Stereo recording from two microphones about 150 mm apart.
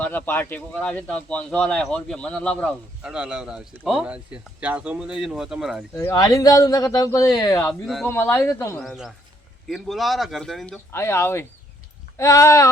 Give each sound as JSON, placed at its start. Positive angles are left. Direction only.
{"t": 0.0, "sound": "speech", "side_deg": 10}
{"t": 3.0, "sound": "speech", "side_deg": -5}
{"t": 5.9, "sound": "speech", "side_deg": 20}
{"t": 7.7, "sound": "speech", "side_deg": 0}
{"t": 8.0, "sound": "speech", "side_deg": 15}
{"t": 8.8, "sound": "speech", "side_deg": 0}
{"t": 10.9, "sound": "speech", "side_deg": 15}